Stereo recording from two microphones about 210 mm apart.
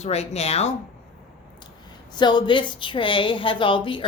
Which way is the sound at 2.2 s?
20° left (ahead or behind).